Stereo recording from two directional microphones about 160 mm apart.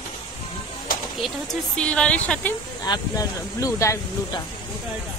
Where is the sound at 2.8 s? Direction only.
25° left (ahead or behind).